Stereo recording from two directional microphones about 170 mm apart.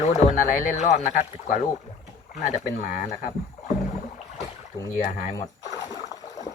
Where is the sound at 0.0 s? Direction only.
45° left (ahead or behind).